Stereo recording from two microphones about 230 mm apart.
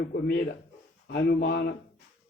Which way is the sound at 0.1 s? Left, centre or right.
Left.